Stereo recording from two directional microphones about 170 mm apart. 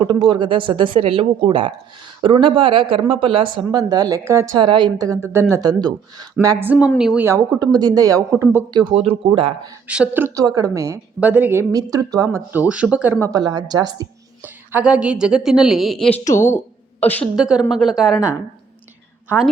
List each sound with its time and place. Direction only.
0.0 s speech: 25° right (ahead or behind)
4.5 s a woman's voice: 25° right (ahead or behind); by 7.3 s 5° right (ahead or behind)
7.3 s speech: 20° right (ahead or behind)
8.8 s speech: 35° right (ahead or behind)
9.8 s a woman's voice: 5° right (ahead or behind)
11.7 s speech: 20° right (ahead or behind)
14.4 s a woman's voice: 10° right (ahead or behind); by 16.2 s 5° left (ahead or behind)
16.4 s speech: 15° left (ahead or behind)
17.3 s a woman's voice: 5° right (ahead or behind)